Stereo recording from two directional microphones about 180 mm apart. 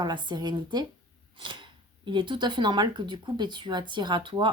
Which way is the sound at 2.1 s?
25° right (ahead or behind).